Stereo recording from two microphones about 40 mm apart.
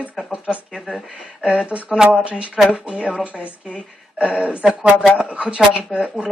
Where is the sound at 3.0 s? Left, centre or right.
Right.